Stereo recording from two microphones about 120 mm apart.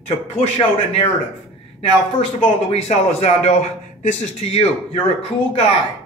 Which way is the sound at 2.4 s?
65° left (ahead or behind).